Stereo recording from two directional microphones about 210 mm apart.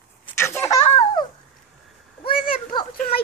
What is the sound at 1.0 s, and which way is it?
Babbling, 20° left (ahead or behind).